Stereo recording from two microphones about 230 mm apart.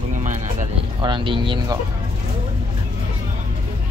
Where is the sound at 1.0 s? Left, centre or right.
Right.